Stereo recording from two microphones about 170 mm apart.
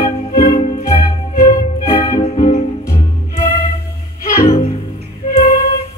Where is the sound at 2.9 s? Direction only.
15° left (ahead or behind).